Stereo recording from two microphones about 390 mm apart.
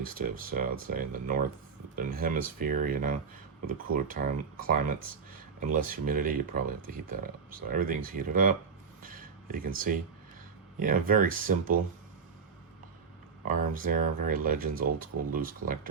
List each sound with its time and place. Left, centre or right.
0.0 s speech: right
9.0 s a sound: right
10.8 s speech: right
13.5 s speech: right